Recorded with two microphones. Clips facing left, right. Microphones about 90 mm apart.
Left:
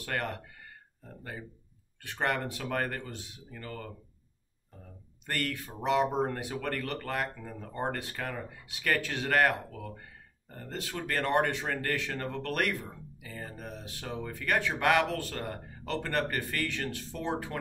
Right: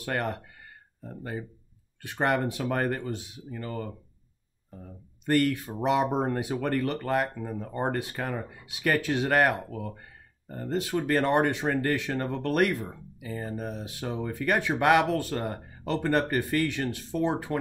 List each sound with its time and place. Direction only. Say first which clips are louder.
0.0 s speech: right 4 dB; 20° right (ahead or behind)
2.0 s speech: right 5 dB; 20° right (ahead or behind)
5.2 s speech: right 10 dB; 20° right (ahead or behind)